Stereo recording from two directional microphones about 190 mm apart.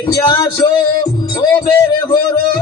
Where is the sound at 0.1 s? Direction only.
20° left (ahead or behind).